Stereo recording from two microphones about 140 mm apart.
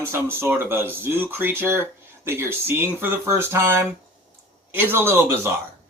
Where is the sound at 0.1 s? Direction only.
15° right (ahead or behind).